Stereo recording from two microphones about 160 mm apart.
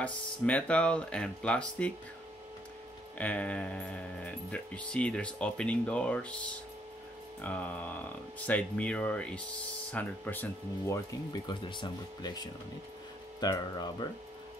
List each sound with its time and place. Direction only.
0.0 s speech: 10° left (ahead or behind)
3.2 s speech: 10° left (ahead or behind); by 14.0 s 25° left (ahead or behind)